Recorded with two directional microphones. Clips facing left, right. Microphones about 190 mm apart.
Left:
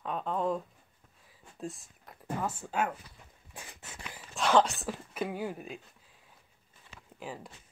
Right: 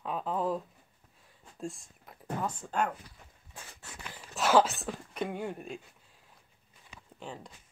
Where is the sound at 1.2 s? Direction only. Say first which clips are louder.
Right 1 dB; centre (ahead or behind).